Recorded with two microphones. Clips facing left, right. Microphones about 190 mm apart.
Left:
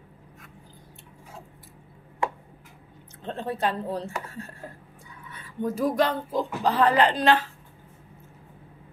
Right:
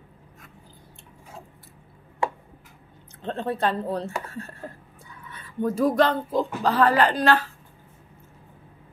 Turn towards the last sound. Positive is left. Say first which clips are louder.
# even
turn(degrees=20)  # may be behind; listen again after turning